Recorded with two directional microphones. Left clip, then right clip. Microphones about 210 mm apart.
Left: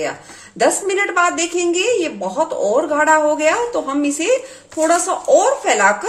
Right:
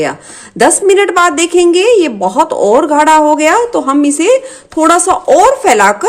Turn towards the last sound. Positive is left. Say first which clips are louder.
# right 7 dB
turn(degrees=-35)  # may be behind; listen again after turning